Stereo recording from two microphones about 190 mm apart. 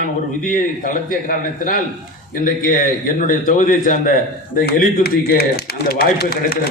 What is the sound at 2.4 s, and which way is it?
A man's voice, 45° left (ahead or behind).